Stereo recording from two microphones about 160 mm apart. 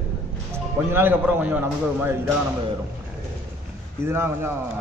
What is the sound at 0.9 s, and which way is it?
A man's voice, 10° right (ahead or behind).